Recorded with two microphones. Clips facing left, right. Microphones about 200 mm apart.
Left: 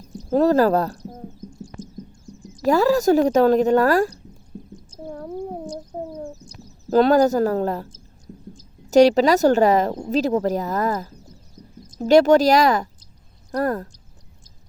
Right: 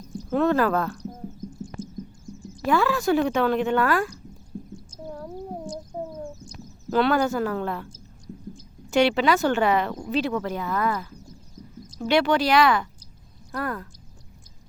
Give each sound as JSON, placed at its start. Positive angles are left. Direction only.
{"t": 0.0, "sound": "speech", "side_deg": 35}
{"t": 2.6, "sound": "speech", "side_deg": 40}
{"t": 4.5, "sound": "a sound", "side_deg": 20}
{"t": 5.6, "sound": "cat", "side_deg": 35}
{"t": 6.9, "sound": "speech", "side_deg": 40}
{"t": 8.9, "sound": "speech", "side_deg": 40}